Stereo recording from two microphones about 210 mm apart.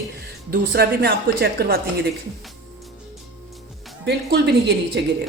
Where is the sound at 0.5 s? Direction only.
50° right (ahead or behind).